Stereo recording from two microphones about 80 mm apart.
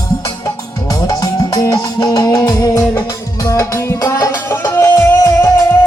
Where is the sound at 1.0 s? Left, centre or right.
Left.